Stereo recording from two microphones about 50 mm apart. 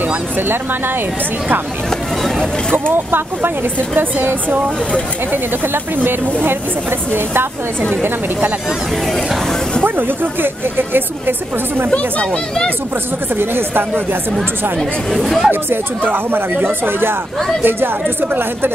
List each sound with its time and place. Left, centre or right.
0.4 s speech: right
1.9 s a sound: centre
2.7 s speech: right
5.3 s speech: right
9.8 s speech: right
11.9 s speech: left
13.4 s speech: right
14.8 s speech: centre
15.7 s speech: right